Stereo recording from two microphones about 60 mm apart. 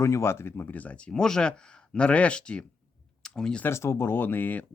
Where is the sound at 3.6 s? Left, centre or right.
Left.